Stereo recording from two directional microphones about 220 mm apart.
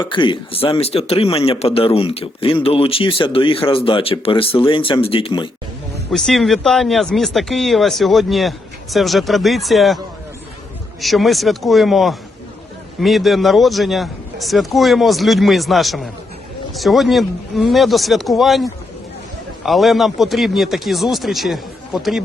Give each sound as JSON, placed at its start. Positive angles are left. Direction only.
{"t": 0.0, "sound": "speech", "side_deg": 20}
{"t": 6.1, "sound": "speech", "side_deg": 0}
{"t": 11.0, "sound": "speech", "side_deg": 0}